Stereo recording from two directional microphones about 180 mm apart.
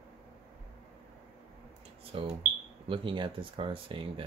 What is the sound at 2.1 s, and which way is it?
Speech, 30° right (ahead or behind).